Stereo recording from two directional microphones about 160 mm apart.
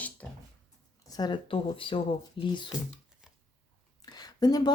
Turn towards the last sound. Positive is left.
turn(degrees=25)  # may be behind; listen again after turning